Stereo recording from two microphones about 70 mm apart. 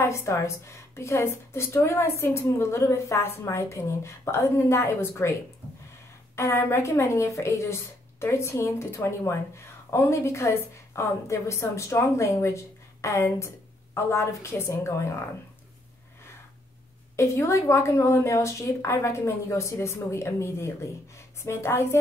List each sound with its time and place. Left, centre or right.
0.0 s a woman's voice: left
6.3 s a woman's voice: left
17.2 s a woman's voice: left